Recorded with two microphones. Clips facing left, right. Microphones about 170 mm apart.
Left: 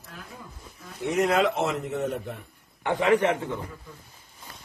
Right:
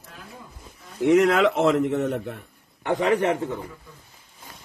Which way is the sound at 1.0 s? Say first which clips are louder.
Right 5 dB; 80° right.